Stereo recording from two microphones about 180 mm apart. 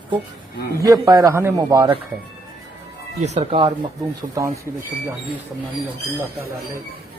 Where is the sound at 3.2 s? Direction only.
35° right (ahead or behind).